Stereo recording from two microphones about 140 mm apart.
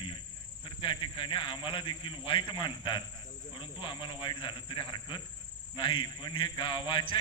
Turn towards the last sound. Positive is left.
turn(degrees=35)  # may be behind; listen again after turning